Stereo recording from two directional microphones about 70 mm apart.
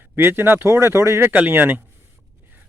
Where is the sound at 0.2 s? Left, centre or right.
Right.